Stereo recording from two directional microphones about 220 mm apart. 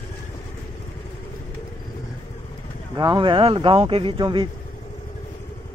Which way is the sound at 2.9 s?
20° right (ahead or behind).